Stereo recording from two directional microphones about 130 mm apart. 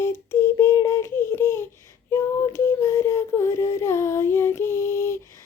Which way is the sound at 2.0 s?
20° left (ahead or behind).